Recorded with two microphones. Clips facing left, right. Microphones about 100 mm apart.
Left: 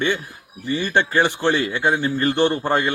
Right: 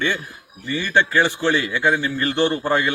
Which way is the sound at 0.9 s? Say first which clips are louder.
Right 1 dB; 20° left (ahead or behind).